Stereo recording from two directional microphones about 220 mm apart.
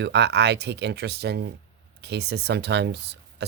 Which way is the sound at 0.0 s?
50° right (ahead or behind).